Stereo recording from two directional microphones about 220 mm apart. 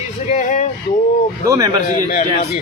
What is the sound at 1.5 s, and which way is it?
Speech, 15° right (ahead or behind).